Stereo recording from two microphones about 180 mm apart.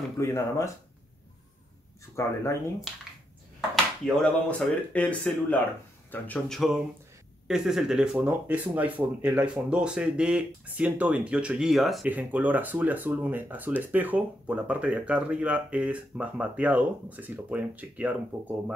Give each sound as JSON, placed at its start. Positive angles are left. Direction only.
{"t": 0.2, "sound": "speech", "side_deg": 15}
{"t": 2.2, "sound": "speech", "side_deg": 15}
{"t": 3.7, "sound": "speech", "side_deg": 5}